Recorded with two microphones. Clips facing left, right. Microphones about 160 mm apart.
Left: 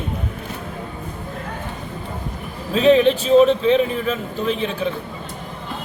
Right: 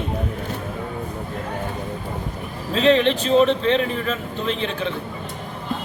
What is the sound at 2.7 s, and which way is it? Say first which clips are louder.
Speech: left 3 dB; 5° left (ahead or behind).